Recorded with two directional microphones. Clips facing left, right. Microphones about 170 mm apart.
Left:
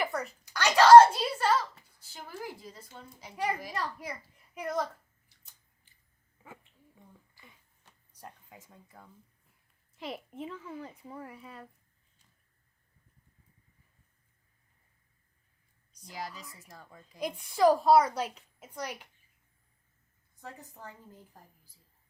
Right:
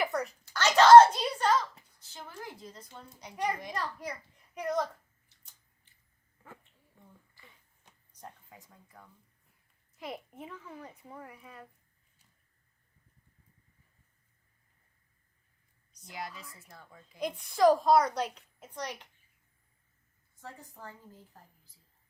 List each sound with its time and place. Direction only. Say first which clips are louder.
0.0 s a sound: right 1 dB; centre (ahead or behind)
0.4 s a sound: even; 10° left (ahead or behind)
2.0 s a child's voice: left 3 dB; 10° left (ahead or behind)
8.5 s a child's voice: left 2 dB; 20° left (ahead or behind)
15.9 s a woman's voice: left 1 dB; 35° left (ahead or behind)
17.2 s a woman's voice: even; 10° left (ahead or behind)
20.3 s a child's voice: left 1 dB; 20° left (ahead or behind)